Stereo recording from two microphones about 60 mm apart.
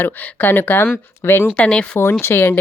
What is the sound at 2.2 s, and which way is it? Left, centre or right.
Speech, left.